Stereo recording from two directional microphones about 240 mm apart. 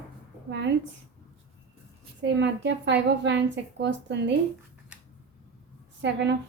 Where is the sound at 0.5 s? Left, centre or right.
Right.